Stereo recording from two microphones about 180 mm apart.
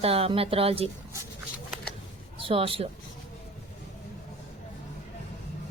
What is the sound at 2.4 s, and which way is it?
Speech, 30° right (ahead or behind).